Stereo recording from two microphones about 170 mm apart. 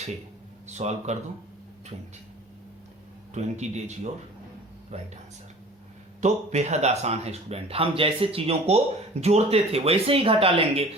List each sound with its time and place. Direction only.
0.7 s speech: 40° right (ahead or behind)
3.3 s speech: 40° right (ahead or behind)
6.2 s speech: 40° right (ahead or behind)